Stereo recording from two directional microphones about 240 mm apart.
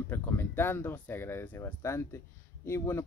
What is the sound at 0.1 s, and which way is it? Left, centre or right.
Speech, centre.